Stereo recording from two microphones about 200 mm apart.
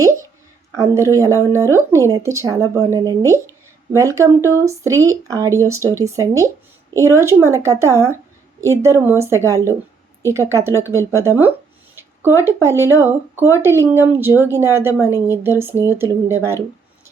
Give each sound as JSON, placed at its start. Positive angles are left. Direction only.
{"t": 0.8, "sound": "speech", "side_deg": -15}
{"t": 10.8, "sound": "speech", "side_deg": 15}
{"t": 12.2, "sound": "speech", "side_deg": -10}